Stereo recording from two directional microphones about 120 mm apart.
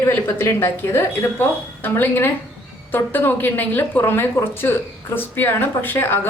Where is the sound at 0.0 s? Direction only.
20° left (ahead or behind).